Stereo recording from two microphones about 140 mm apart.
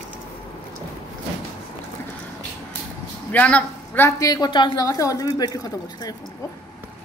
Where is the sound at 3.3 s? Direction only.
10° left (ahead or behind).